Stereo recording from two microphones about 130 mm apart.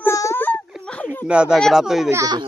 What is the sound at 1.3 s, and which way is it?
Speech, 5° right (ahead or behind).